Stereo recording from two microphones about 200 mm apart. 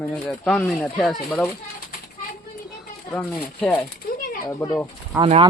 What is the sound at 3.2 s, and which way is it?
Speech, 10° left (ahead or behind).